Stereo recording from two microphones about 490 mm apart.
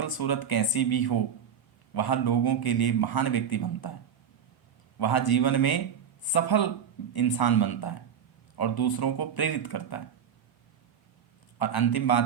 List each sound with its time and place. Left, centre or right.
0.0 s a man's voice: left
4.9 s a man's voice: left
11.6 s a man's voice: left